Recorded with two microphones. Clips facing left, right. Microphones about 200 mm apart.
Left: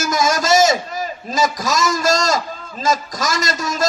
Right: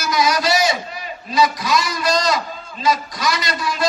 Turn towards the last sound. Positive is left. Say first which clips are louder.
# left 2 dB
turn(degrees=45)  # may be behind; listen again after turning